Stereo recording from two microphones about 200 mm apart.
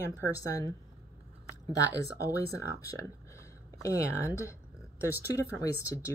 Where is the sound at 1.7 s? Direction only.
15° left (ahead or behind).